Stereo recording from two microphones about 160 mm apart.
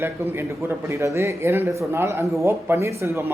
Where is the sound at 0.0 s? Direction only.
15° right (ahead or behind).